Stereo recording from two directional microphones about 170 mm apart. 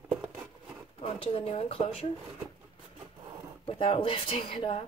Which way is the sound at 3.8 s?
35° left (ahead or behind).